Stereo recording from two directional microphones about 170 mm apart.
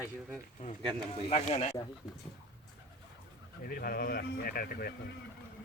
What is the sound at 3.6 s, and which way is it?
Speech, 60° left (ahead or behind).